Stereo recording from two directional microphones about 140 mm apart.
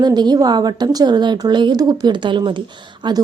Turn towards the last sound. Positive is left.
turn(degrees=-30)  # may be behind; listen again after turning